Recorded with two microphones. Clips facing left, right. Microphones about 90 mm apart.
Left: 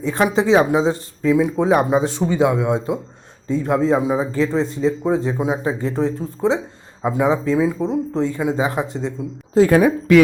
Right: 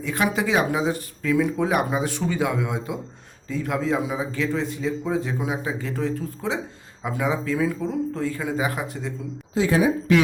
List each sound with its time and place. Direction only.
0.0 s a man's voice: 30° left (ahead or behind)
9.6 s speech: 55° left (ahead or behind)